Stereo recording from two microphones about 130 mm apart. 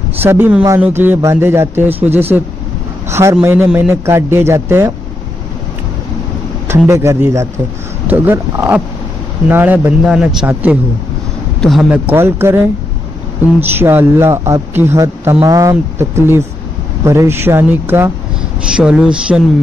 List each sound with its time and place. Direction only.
0.2 s a man's voice: 15° right (ahead or behind)
3.3 s a man's voice: 10° right (ahead or behind)
6.9 s a man's voice: 20° right (ahead or behind)
11.6 s a man's voice: 5° left (ahead or behind)
11.9 s a man's voice: 15° right (ahead or behind)
18.7 s a man's voice: 5° right (ahead or behind)